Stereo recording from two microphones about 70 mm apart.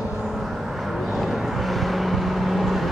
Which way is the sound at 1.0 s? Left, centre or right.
Centre.